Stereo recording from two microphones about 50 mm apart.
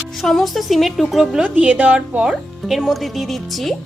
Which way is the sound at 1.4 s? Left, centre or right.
Right.